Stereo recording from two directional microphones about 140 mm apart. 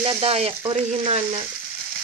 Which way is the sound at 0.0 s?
40° right (ahead or behind).